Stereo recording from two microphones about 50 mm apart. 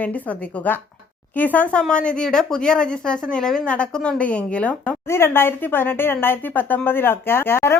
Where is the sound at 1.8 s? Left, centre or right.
Centre.